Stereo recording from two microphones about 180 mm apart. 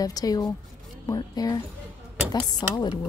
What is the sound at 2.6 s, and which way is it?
Speech, 20° left (ahead or behind).